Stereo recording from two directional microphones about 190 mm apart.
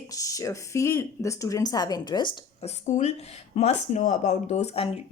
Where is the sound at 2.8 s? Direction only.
35° left (ahead or behind).